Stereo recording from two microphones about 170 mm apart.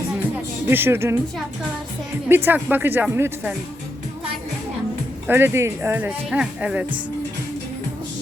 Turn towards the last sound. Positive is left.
turn(degrees=-5)  # may be behind; listen again after turning